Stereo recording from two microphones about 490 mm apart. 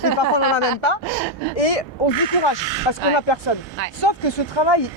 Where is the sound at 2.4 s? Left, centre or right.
Left.